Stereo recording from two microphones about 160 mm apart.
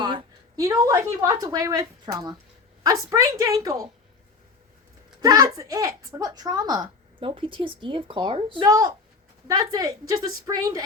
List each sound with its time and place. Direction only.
0.0 s a woman's voice: 30° right (ahead or behind)
5.2 s a child's voice: 20° right (ahead or behind)